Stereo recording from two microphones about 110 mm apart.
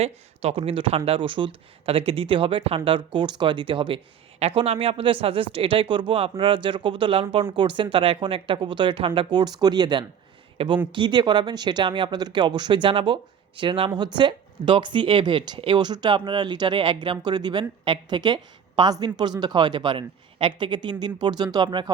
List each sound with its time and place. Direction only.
0.0 s speech: 65° right (ahead or behind)
4.4 s speech: 65° right (ahead or behind); by 10.1 s 45° right (ahead or behind)
10.6 s speech: 55° right (ahead or behind)
10.9 s speech: 45° right (ahead or behind)